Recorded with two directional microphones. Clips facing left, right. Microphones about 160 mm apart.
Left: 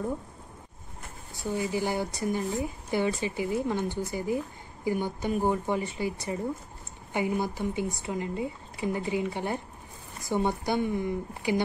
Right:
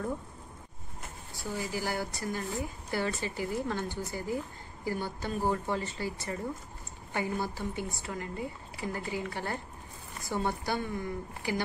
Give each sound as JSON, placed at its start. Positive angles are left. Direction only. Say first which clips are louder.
{"t": 1.3, "sound": "speech", "louder": "left 6 dB", "side_deg": 20}